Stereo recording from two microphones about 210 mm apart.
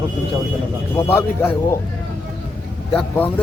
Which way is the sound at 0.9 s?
10° left (ahead or behind).